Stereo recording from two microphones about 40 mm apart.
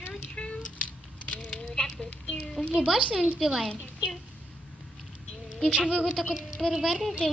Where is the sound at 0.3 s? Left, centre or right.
Left.